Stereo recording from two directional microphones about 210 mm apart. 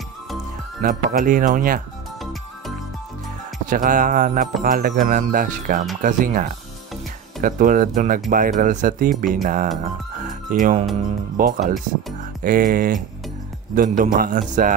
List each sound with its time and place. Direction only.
0.8 s speech: 40° right (ahead or behind)
3.6 s speech: 40° right (ahead or behind)
7.4 s speech: 40° right (ahead or behind)
10.2 s music: 35° right (ahead or behind)
11.3 s speech: 40° right (ahead or behind)